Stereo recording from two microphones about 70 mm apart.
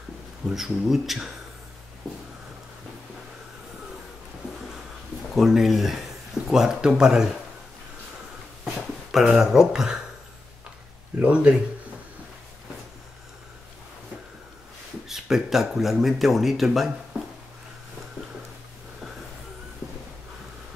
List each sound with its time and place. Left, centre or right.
0.5 s speech: centre
5.3 s speech: centre
8.6 s a sound: centre
9.2 s speech: centre
11.1 s speech: centre
15.0 s speech: centre